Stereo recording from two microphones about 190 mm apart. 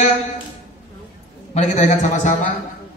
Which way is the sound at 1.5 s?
35° left (ahead or behind).